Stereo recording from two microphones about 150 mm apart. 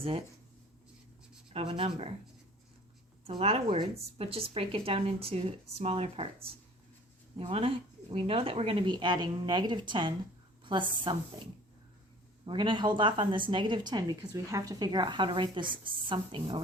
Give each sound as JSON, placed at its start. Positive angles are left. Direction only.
{"t": 1.5, "sound": "a woman's voice", "side_deg": -35}
{"t": 3.2, "sound": "a woman's voice", "side_deg": -40}
{"t": 7.3, "sound": "a woman's voice", "side_deg": -35}
{"t": 12.5, "sound": "a woman's voice", "side_deg": -30}